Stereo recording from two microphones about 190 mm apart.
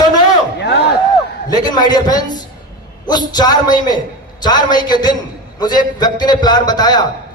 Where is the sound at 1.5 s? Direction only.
20° left (ahead or behind).